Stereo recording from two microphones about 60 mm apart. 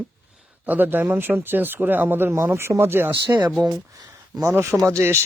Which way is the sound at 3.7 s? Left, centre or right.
Right.